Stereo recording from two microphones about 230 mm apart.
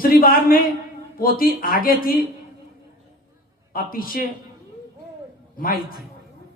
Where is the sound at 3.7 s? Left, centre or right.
Left.